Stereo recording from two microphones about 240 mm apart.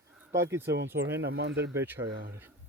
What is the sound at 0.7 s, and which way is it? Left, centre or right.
Speech, right.